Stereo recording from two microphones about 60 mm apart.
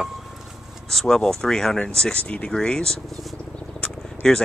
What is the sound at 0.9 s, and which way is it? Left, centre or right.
Speech, centre.